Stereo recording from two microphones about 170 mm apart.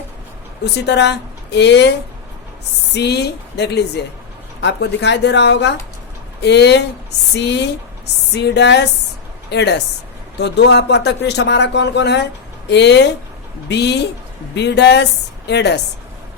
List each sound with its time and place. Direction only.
0.6 s speech: 90° left
2.9 s speech: 80° left